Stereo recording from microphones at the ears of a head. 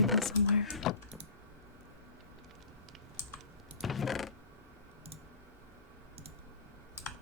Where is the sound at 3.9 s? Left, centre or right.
Left.